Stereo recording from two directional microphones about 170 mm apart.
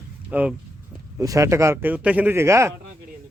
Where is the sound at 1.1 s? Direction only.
20° right (ahead or behind).